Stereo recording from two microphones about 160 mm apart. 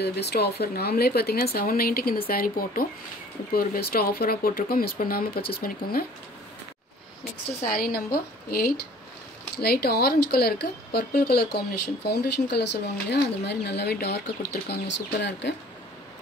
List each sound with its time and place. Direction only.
0.0 s speech: 90° left; by 6.0 s 65° left (ahead or behind)
7.6 s speech: 65° left (ahead or behind); by 15.5 s 90° left